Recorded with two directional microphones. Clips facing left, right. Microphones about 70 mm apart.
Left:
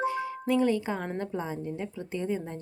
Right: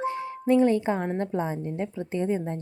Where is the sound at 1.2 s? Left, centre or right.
Right.